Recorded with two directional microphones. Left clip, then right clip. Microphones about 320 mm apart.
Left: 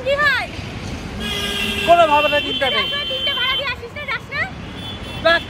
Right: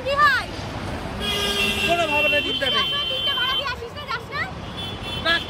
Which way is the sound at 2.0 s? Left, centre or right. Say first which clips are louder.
Left 6 dB; centre.